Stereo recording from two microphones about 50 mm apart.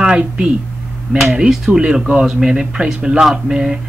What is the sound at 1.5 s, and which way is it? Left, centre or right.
Speech, centre.